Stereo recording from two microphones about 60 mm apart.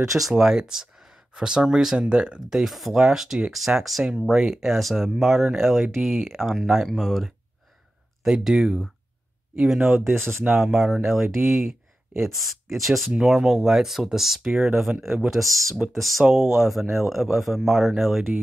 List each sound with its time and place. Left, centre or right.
0.0 s speech: right
0.4 s speech: centre
2.6 s speech: centre
9.9 s speech: right
10.6 s speech: centre